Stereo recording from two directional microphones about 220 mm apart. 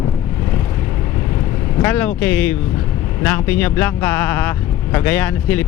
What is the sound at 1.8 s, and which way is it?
Speech, 10° left (ahead or behind).